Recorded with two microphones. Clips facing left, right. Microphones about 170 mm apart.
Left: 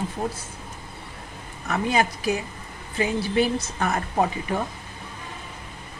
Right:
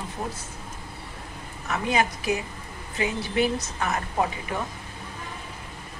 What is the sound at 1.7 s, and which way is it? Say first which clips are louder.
A woman's voice: left 2 dB; 35° left (ahead or behind).